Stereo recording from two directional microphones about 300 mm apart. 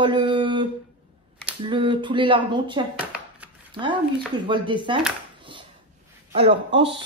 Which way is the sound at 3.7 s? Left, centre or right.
Centre.